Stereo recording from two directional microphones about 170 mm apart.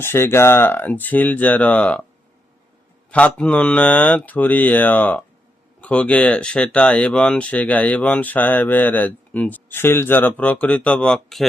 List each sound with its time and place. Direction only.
0.0 s speech: 15° left (ahead or behind)
3.1 s speech: 5° left (ahead or behind)